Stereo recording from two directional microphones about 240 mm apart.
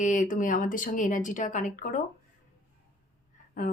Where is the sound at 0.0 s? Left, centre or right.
Left.